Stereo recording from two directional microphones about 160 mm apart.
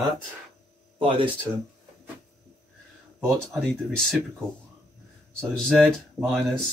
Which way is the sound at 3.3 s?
Centre (ahead or behind).